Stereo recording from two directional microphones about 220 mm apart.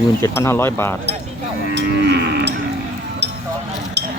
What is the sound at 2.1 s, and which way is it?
Livestock, 50° right (ahead or behind).